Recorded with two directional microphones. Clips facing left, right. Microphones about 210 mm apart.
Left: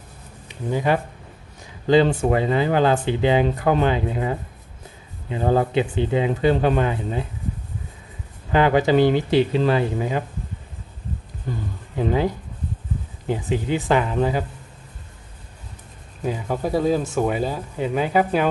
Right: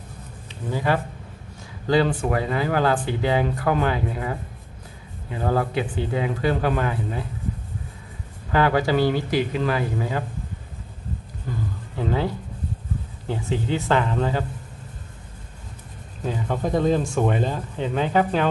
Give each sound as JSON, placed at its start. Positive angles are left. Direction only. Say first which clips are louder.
{"t": 0.5, "sound": "speech", "louder": "left 3 dB", "side_deg": 20}
{"t": 8.5, "sound": "speech", "louder": "left 3 dB", "side_deg": 20}
{"t": 12.0, "sound": "speech", "louder": "left 3 dB", "side_deg": 15}
{"t": 13.3, "sound": "speech", "louder": "left 2 dB", "side_deg": 15}
{"t": 16.3, "sound": "speech", "louder": "left 1 dB", "side_deg": 10}